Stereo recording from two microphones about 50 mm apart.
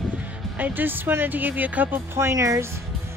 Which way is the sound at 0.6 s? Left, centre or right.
Right.